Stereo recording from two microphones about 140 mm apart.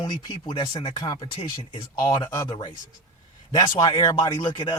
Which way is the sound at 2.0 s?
25° left (ahead or behind).